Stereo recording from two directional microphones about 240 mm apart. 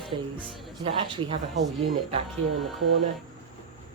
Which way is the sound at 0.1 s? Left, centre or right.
Right.